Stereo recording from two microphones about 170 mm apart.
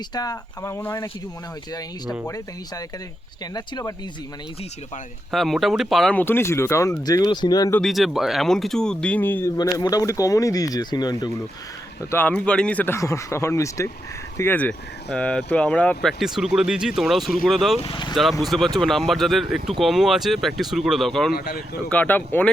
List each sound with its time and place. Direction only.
0.1 s speech: 20° left (ahead or behind)
2.2 s speech: 20° left (ahead or behind)
5.3 s speech: centre (ahead or behind); by 7.8 s 20° left (ahead or behind)
7.8 s speech: centre (ahead or behind); by 11.3 s 25° left (ahead or behind)
12.1 s speech: 10° left (ahead or behind)
17.7 s speech: 30° left (ahead or behind)
18.1 s speech: centre (ahead or behind)
21.3 s speech: 65° left (ahead or behind)
21.8 s speech: 10° left (ahead or behind)